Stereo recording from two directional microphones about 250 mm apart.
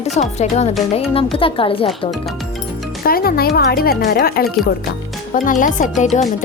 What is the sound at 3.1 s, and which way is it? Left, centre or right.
Speech, left.